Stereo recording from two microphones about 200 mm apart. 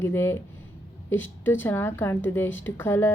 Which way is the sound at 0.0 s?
10° left (ahead or behind).